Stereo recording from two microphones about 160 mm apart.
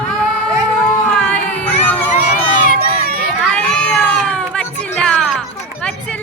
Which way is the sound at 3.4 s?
5° left (ahead or behind).